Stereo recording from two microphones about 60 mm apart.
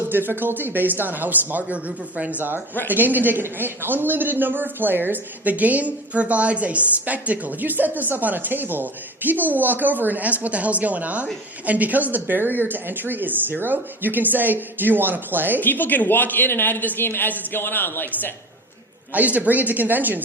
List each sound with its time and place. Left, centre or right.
0.1 s a man's voice: right
15.6 s speech: left
19.1 s speech: right